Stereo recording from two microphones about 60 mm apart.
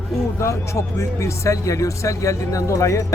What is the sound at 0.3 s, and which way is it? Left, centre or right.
Speech, left.